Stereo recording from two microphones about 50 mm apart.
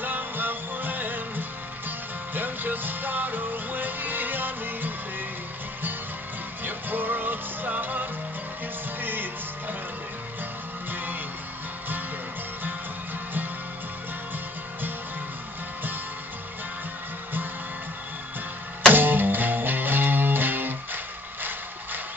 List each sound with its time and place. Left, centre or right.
0.0 s music: right
6.6 s music: right
18.9 s music: right